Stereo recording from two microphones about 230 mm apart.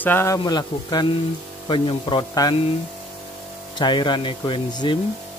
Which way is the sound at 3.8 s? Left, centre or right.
Centre.